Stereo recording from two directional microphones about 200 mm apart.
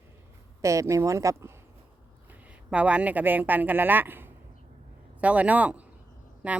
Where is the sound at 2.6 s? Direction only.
5° right (ahead or behind).